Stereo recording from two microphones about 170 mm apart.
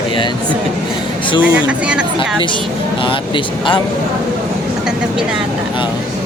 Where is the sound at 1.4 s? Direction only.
5° right (ahead or behind).